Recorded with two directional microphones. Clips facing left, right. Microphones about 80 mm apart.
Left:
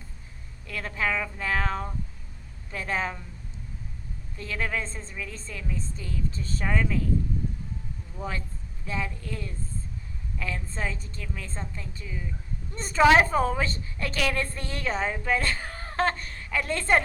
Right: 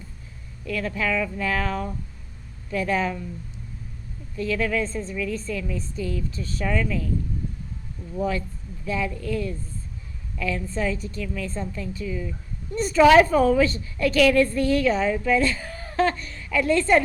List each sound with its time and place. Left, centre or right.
0.7 s a woman's voice: left
4.4 s a woman's voice: left
8.9 s a woman's voice: left